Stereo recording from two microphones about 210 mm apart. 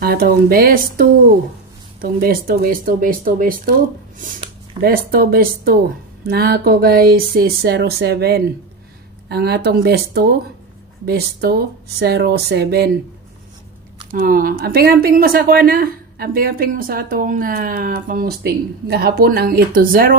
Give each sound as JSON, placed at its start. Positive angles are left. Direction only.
{"t": 0.0, "sound": "a woman's voice", "side_deg": -45}
{"t": 14.1, "sound": "a woman's voice", "side_deg": -45}